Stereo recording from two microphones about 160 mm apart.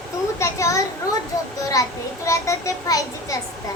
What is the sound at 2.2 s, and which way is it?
A child's voice, 20° left (ahead or behind).